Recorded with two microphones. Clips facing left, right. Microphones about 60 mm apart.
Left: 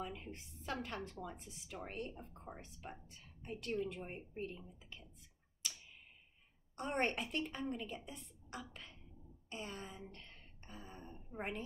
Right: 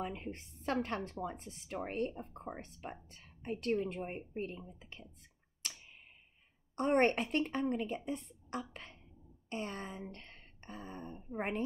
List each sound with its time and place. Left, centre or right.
0.0 s speech: right
5.6 s tick-tock: right
6.7 s speech: right